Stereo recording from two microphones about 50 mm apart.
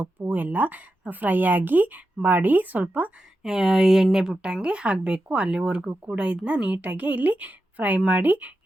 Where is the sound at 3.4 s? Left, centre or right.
Centre.